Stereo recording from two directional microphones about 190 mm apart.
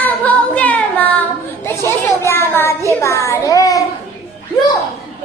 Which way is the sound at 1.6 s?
10° left (ahead or behind).